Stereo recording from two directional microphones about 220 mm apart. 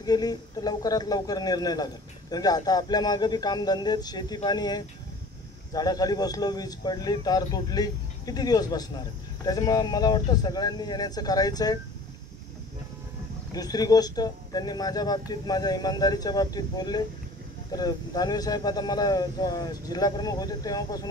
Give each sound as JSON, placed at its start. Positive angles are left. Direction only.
{"t": 0.0, "sound": "a man's voice", "side_deg": 15}
{"t": 13.5, "sound": "a man's voice", "side_deg": 15}